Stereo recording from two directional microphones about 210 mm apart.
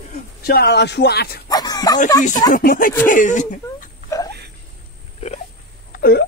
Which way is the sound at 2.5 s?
40° left (ahead or behind).